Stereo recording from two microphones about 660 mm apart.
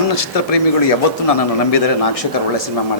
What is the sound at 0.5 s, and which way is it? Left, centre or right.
Speech, left.